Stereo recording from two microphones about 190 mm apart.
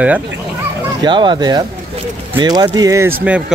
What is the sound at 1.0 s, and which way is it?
Speech, 25° right (ahead or behind).